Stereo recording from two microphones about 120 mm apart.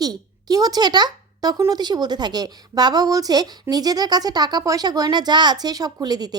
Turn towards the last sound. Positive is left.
turn(degrees=-35)  # may be behind; listen again after turning